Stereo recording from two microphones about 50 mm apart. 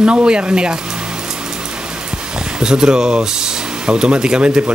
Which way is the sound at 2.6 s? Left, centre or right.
Centre.